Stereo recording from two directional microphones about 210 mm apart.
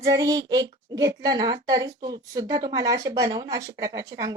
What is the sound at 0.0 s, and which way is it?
A child's voice, 15° right (ahead or behind).